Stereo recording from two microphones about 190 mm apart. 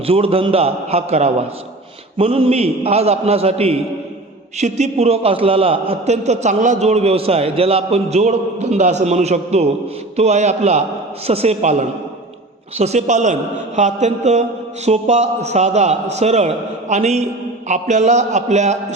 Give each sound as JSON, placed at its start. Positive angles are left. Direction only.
{"t": 0.0, "sound": "a man's voice", "side_deg": -30}